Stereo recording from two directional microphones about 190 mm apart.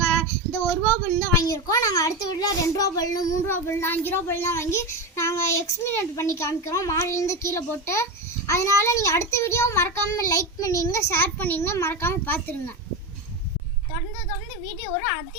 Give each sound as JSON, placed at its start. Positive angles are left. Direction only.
{"t": 0.0, "sound": "child singing", "side_deg": 10}
{"t": 1.4, "sound": "a child's voice", "side_deg": 20}